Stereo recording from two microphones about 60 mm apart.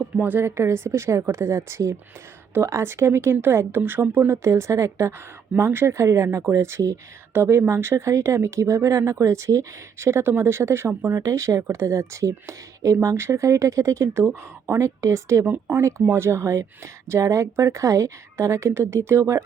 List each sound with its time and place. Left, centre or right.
0.0 s a woman's voice: right
0.4 s speech: right
4.3 s speech: right
15.4 s speech: right
15.8 s speech: right